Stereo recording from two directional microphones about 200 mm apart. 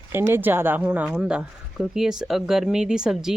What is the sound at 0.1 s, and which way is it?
Speech, 10° right (ahead or behind).